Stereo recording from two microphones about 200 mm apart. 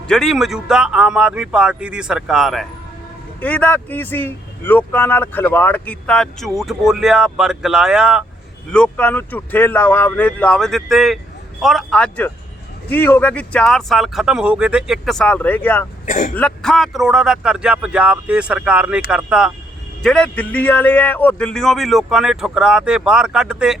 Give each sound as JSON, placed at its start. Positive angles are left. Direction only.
{"t": 0.1, "sound": "a man's voice", "side_deg": 0}
{"t": 8.7, "sound": "a man's voice", "side_deg": 5}
{"t": 16.0, "sound": "speech", "side_deg": 40}
{"t": 16.3, "sound": "a man's voice", "side_deg": 5}